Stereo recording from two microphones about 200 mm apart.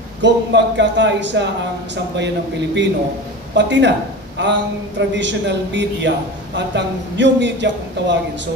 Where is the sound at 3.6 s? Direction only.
60° right (ahead or behind).